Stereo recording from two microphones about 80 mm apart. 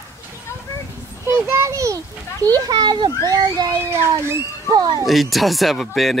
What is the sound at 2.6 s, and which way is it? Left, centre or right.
A child's voice, right.